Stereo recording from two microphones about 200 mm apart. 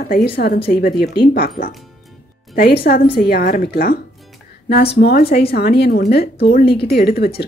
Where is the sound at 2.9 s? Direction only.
45° left (ahead or behind).